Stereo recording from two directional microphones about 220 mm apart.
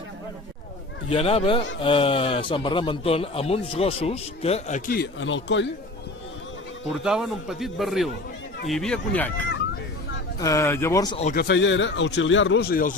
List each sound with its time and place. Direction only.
1.1 s a man's voice: 25° left (ahead or behind)
4.9 s speech: 50° left (ahead or behind)
7.0 s a man's voice: centre (ahead or behind)
10.4 s speech: 15° left (ahead or behind)
11.3 s speech: 45° left (ahead or behind)